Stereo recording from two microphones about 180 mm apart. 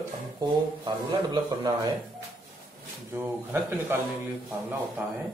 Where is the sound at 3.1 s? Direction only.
10° right (ahead or behind).